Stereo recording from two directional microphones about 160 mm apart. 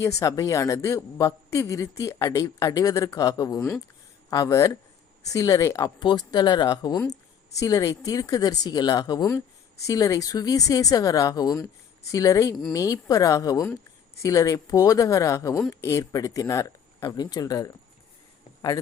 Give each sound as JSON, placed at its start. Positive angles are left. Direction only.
{"t": 0.0, "sound": "a woman's voice", "side_deg": 20}